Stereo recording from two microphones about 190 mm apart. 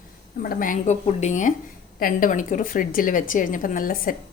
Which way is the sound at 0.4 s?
45° left (ahead or behind).